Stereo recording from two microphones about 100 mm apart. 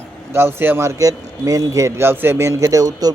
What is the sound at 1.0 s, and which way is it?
Speech, 35° right (ahead or behind).